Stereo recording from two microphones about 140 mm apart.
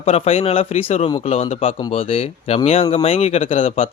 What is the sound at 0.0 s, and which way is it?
Speech, 45° left (ahead or behind).